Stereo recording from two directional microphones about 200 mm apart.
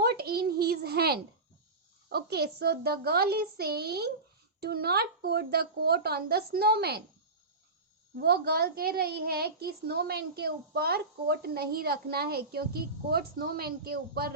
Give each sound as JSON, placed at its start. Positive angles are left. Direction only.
{"t": 0.0, "sound": "a sound", "side_deg": -50}
{"t": 2.0, "sound": "a child's voice", "side_deg": -55}
{"t": 8.1, "sound": "a child's voice", "side_deg": -55}